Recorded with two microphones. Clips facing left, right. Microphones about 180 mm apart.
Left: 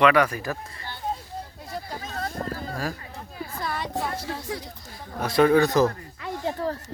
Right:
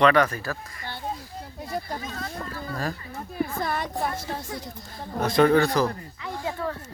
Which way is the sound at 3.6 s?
50° right (ahead or behind).